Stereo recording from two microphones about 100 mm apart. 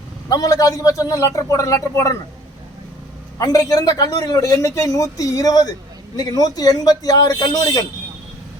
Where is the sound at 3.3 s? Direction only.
35° left (ahead or behind).